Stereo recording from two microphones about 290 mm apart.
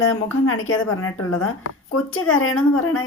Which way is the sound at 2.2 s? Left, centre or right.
Left.